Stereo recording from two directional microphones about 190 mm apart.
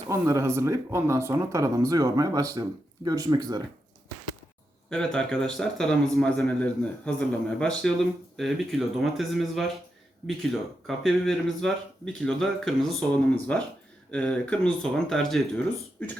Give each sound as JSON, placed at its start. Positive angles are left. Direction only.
{"t": 0.1, "sound": "speech", "side_deg": -15}
{"t": 4.9, "sound": "a man's voice", "side_deg": 5}